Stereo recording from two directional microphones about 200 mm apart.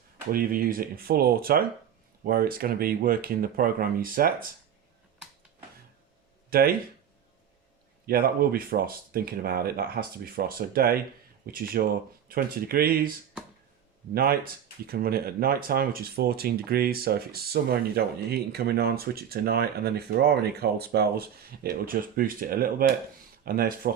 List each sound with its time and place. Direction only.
0.3 s speech: 45° right (ahead or behind)
6.5 s speech: 50° right (ahead or behind)
8.0 s speech: 45° right (ahead or behind)